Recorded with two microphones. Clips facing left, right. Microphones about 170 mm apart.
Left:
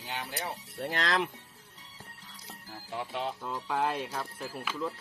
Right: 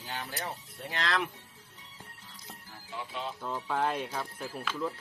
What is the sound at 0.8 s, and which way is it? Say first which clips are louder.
Speech: left 2 dB; 45° left (ahead or behind).